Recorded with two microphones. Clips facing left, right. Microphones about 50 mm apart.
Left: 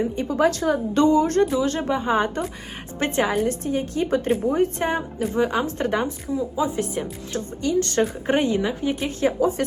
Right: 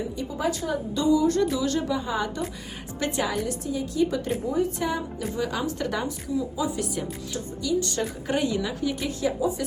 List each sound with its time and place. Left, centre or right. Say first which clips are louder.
0.3 s speech: left 8 dB; left
1.5 s a woman's voice: left 3 dB; left
7.3 s speech: left 4 dB; left
8.3 s a woman's voice: left 5 dB; left
9.4 s speech: left 6 dB; left